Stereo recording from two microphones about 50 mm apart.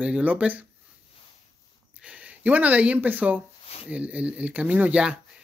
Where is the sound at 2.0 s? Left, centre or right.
Right.